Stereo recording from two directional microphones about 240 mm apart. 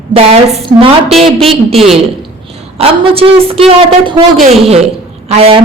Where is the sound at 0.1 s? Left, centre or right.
Right.